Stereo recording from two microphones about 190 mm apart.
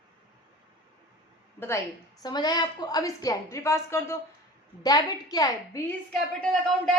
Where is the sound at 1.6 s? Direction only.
15° left (ahead or behind).